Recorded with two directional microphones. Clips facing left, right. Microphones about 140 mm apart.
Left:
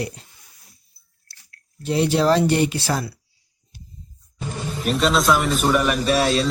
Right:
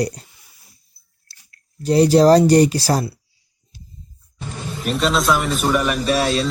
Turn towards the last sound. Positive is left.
turn(degrees=0)  # may be behind; listen again after turning